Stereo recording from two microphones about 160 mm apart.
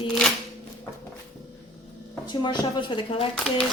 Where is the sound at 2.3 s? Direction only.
30° left (ahead or behind).